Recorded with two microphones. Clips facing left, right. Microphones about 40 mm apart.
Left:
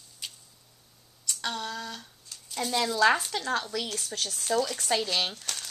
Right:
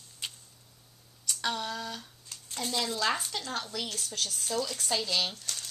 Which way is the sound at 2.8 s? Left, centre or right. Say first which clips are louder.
Left 8 dB; left.